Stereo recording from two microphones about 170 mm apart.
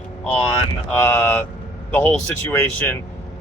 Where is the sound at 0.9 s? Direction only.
15° left (ahead or behind).